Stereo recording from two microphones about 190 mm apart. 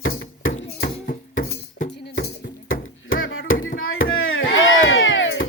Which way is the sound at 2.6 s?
90° left.